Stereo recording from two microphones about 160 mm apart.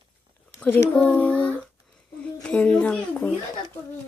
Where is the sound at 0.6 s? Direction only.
10° left (ahead or behind).